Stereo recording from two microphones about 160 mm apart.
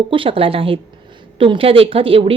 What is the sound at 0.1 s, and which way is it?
A woman's voice, 35° right (ahead or behind).